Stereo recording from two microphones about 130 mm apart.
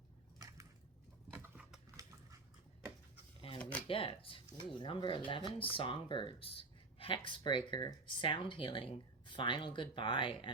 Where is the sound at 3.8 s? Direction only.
45° left (ahead or behind).